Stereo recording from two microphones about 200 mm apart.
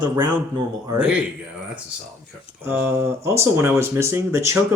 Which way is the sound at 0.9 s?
5° right (ahead or behind).